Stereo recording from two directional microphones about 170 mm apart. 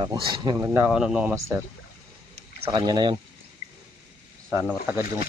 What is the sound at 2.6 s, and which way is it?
Speech, 30° right (ahead or behind).